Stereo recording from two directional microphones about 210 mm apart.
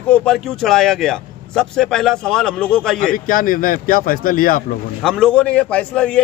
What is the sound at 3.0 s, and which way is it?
Speech, 40° left (ahead or behind).